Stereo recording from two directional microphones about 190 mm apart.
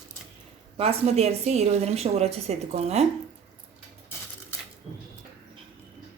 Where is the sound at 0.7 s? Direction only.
35° right (ahead or behind).